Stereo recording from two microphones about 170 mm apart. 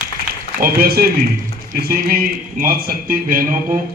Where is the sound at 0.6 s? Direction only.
60° right (ahead or behind).